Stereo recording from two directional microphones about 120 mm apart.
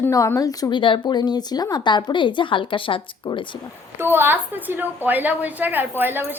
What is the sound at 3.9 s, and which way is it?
A woman's voice, 20° right (ahead or behind).